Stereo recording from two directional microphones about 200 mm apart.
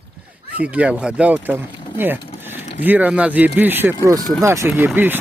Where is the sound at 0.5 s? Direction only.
5° right (ahead or behind).